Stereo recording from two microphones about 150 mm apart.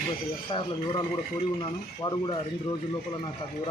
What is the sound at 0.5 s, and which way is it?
A man's voice, 35° left (ahead or behind).